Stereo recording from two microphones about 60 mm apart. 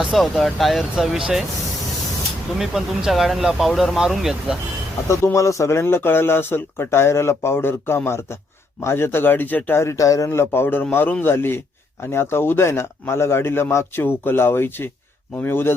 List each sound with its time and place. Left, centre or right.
0.1 s speech: centre
2.6 s speech: centre
5.0 s a man's voice: left
9.7 s a man's voice: left